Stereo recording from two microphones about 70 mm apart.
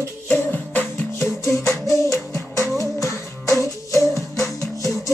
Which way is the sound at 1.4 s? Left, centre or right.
Left.